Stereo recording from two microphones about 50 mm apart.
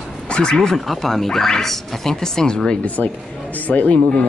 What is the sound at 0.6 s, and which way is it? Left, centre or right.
Speech, centre.